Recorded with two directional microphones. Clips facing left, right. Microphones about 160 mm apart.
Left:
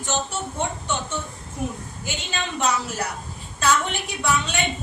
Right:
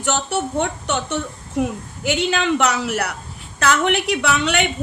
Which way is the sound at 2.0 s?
75° right (ahead or behind).